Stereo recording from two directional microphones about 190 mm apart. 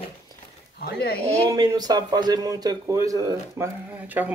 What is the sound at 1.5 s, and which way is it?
A man's voice, 20° right (ahead or behind).